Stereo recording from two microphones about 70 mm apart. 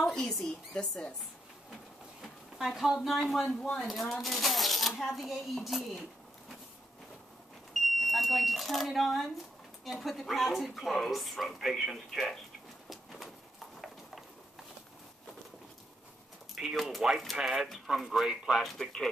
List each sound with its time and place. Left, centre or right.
0.0 s speech: centre
2.2 s speech: centre
8.0 s speech: centre
12.9 s a sound: centre
16.5 s speech: centre
18.6 s speech: centre